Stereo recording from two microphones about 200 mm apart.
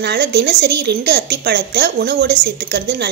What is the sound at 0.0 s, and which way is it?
A woman's voice, 55° right (ahead or behind).